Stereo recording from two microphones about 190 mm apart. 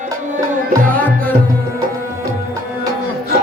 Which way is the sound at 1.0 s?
10° left (ahead or behind).